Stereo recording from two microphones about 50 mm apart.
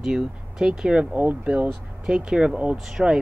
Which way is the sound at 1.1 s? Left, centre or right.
Right.